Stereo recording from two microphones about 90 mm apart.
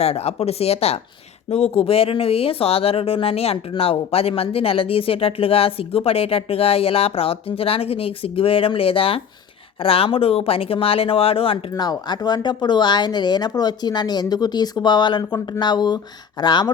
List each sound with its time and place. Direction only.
0.6 s a woman's voice: 90° left
11.7 s speech: 50° left (ahead or behind)